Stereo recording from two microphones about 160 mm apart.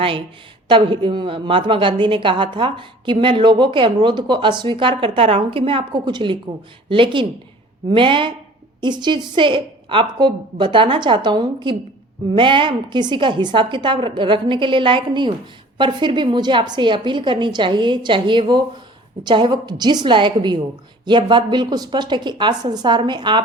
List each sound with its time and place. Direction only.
0.7 s a woman's voice: 30° right (ahead or behind)